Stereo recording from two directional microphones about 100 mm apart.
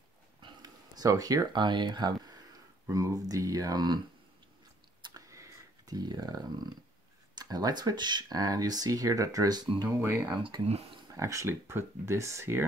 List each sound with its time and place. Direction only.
0.4 s a sound: 45° right (ahead or behind)
2.9 s speech: 35° right (ahead or behind)
5.3 s a sound: 35° right (ahead or behind)
7.3 s speech: 40° right (ahead or behind)
10.3 s speech: 55° right (ahead or behind)
11.1 s speech: 35° right (ahead or behind)